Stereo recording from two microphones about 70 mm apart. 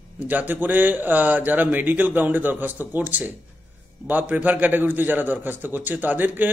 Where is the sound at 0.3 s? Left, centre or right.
Right.